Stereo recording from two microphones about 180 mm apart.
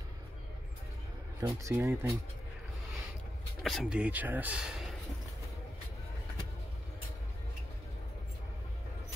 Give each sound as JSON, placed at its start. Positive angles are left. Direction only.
{"t": 1.4, "sound": "speech", "side_deg": -15}
{"t": 3.6, "sound": "speech", "side_deg": 0}